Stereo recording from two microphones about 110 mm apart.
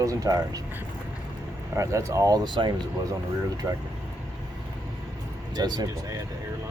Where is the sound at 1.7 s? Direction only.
30° right (ahead or behind).